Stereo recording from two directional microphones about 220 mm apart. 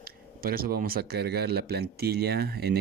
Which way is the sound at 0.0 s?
40° right (ahead or behind).